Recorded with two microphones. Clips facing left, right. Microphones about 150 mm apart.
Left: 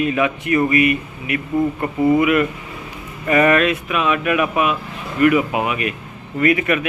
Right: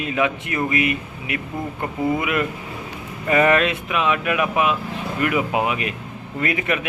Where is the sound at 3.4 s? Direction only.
20° right (ahead or behind).